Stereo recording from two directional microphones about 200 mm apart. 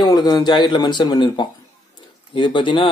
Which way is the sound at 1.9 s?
25° left (ahead or behind).